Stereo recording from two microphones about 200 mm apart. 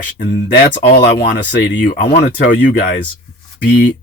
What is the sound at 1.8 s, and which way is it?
Speech, 45° left (ahead or behind).